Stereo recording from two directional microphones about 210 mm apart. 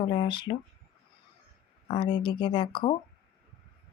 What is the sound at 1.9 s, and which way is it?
Speech, 20° left (ahead or behind).